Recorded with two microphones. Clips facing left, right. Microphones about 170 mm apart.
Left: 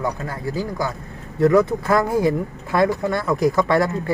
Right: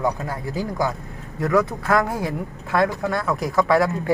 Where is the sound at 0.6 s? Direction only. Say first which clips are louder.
Right 2 dB; 20° right (ahead or behind).